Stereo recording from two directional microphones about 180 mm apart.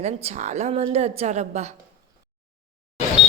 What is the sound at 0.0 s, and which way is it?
A woman's voice, 40° right (ahead or behind).